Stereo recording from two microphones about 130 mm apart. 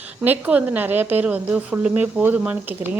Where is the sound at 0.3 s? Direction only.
10° right (ahead or behind).